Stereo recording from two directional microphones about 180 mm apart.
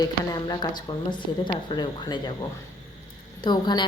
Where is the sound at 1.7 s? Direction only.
25° left (ahead or behind).